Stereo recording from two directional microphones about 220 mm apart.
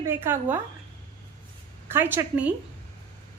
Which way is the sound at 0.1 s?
10° right (ahead or behind).